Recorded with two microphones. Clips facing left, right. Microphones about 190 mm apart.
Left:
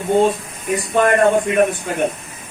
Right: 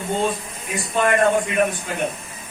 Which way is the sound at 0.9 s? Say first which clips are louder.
Left 4 dB; 40° left (ahead or behind).